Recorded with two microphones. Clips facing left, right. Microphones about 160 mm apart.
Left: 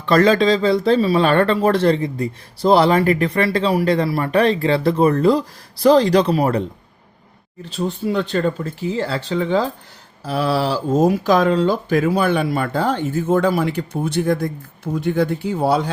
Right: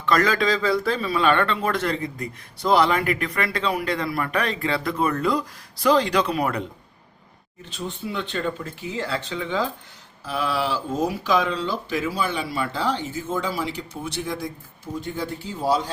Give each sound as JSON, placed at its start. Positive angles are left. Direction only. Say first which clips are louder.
{"t": 0.0, "sound": "speech", "louder": "left 7 dB", "side_deg": 30}
{"t": 14.9, "sound": "speech", "louder": "left 10 dB", "side_deg": 65}